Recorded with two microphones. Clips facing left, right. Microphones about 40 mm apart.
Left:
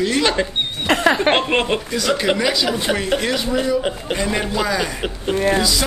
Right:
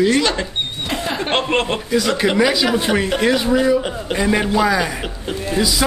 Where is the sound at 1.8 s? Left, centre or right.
Centre.